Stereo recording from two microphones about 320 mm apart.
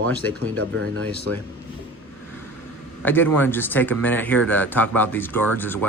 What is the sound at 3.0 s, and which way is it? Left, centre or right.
Speech, centre.